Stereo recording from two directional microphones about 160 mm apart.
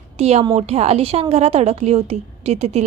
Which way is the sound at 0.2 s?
40° right (ahead or behind).